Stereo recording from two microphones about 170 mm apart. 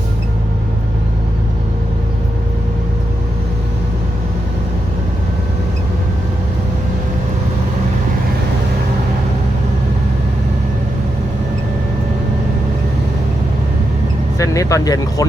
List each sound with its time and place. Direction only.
14.3 s speech: 20° left (ahead or behind)